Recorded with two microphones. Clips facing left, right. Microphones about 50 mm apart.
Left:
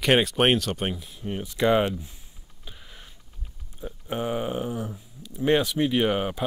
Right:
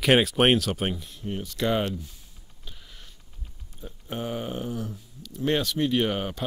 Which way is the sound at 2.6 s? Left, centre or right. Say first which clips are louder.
Left 2 dB; centre.